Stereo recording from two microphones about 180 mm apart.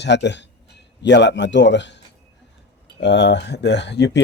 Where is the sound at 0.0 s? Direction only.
75° left (ahead or behind).